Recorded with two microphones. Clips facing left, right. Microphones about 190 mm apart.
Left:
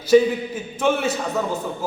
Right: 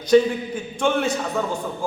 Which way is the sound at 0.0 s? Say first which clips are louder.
Left 1 dB; 5° left (ahead or behind).